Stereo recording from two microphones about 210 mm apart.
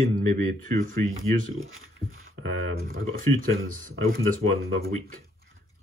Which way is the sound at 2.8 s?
45° right (ahead or behind).